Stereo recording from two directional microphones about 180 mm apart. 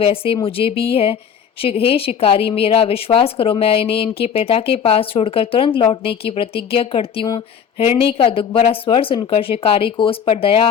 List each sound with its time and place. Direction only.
0.0 s a woman's voice: 30° left (ahead or behind)